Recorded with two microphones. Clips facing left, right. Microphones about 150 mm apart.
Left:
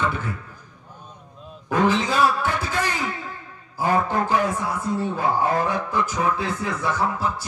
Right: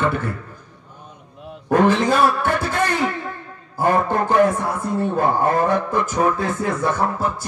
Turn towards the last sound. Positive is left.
turn(degrees=-50)  # may be behind; listen again after turning